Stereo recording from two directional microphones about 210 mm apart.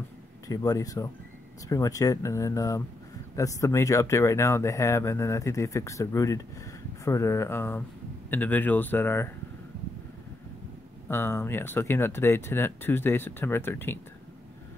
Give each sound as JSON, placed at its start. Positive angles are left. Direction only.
{"t": 0.5, "sound": "speech", "side_deg": 15}
{"t": 11.1, "sound": "speech", "side_deg": 10}